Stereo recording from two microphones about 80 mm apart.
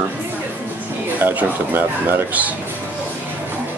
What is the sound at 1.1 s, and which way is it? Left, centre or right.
Speech, right.